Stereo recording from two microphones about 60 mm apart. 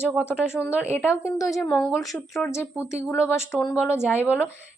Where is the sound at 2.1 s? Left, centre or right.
Centre.